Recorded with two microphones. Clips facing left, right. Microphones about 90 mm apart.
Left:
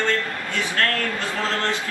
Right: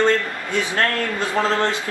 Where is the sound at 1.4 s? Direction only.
20° right (ahead or behind).